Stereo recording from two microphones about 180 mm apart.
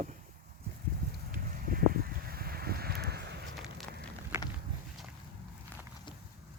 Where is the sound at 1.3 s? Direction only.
50° right (ahead or behind).